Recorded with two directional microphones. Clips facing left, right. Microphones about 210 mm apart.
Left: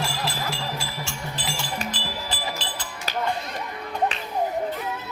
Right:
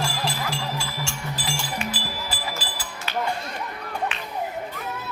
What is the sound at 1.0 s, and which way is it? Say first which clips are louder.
Music: right 1 dB; centre (ahead or behind).